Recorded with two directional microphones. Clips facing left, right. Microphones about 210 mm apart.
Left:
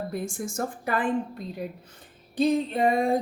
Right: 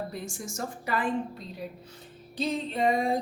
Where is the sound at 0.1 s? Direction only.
55° left (ahead or behind).